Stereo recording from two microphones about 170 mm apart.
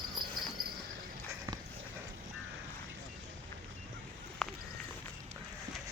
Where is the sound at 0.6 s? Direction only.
5° right (ahead or behind).